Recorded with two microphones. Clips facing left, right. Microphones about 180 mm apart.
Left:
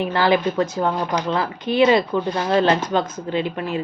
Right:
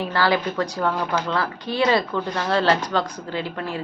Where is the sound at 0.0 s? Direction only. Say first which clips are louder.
Left 3 dB; 20° left (ahead or behind).